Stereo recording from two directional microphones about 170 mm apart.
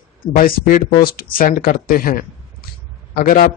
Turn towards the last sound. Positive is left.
turn(degrees=55)  # may be behind; listen again after turning